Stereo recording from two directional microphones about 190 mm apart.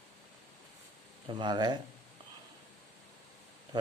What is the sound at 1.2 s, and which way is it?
Speech, 25° right (ahead or behind).